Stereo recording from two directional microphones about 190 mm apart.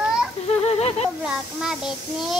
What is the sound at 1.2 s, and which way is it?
A child's voice, 5° right (ahead or behind).